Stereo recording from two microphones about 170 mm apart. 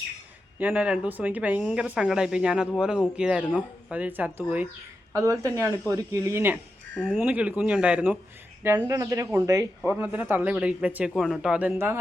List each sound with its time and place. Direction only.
0.6 s a man's voice: 10° right (ahead or behind)
6.9 s speech: 5° left (ahead or behind)
7.2 s a man's voice: 10° right (ahead or behind)
8.9 s speech: 20° right (ahead or behind)
9.8 s a man's voice: 10° right (ahead or behind)